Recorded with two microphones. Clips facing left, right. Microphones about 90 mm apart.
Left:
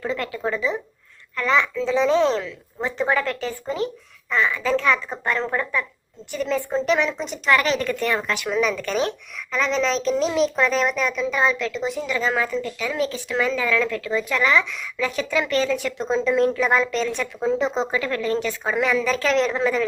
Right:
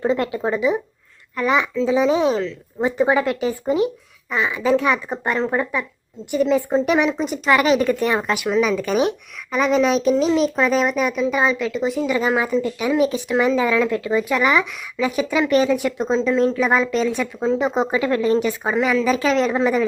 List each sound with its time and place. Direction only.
0.0 s a woman's voice: 25° right (ahead or behind)
8.4 s a woman's voice: 5° right (ahead or behind)
12.0 s speech: 15° right (ahead or behind)
16.0 s a woman's voice: 5° left (ahead or behind)